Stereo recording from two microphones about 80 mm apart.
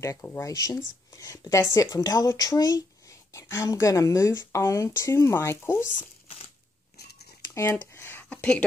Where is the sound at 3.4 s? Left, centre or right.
Left.